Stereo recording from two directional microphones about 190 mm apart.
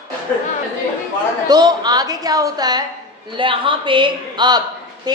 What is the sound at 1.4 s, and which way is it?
A woman's voice, 20° right (ahead or behind).